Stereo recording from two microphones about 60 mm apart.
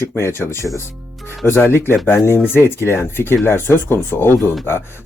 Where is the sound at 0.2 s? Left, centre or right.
Left.